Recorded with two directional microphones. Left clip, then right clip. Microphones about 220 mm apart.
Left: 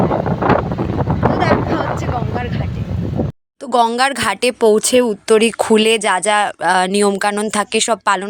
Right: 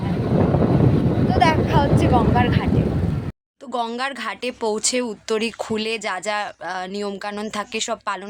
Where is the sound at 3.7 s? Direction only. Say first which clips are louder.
Left 11 dB; 30° left (ahead or behind).